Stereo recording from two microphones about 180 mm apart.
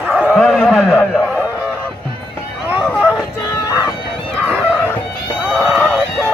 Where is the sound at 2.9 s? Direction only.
5° left (ahead or behind).